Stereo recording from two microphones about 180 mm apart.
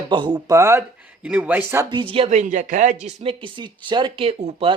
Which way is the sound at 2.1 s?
40° right (ahead or behind).